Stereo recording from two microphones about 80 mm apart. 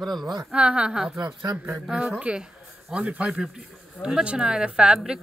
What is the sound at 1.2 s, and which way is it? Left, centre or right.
Speech, right.